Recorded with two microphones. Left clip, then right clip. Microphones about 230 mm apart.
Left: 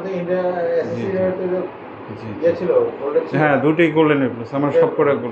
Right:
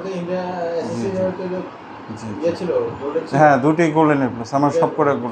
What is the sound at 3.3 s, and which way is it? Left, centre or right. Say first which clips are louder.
A man's voice: right 5 dB; right.